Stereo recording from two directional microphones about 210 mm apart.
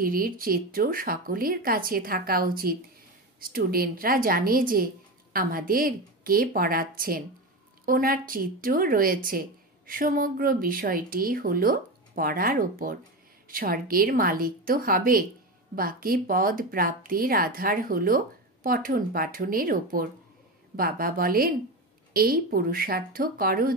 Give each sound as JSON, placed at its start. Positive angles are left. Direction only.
{"t": 0.0, "sound": "speech", "side_deg": -45}